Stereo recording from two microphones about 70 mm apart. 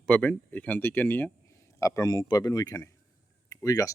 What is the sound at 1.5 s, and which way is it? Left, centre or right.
Speech, left.